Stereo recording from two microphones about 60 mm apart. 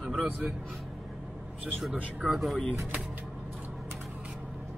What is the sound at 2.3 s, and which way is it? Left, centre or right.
Speech, centre.